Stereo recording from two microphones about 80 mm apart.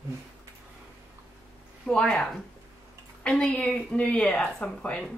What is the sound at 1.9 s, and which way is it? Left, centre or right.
Speech, centre.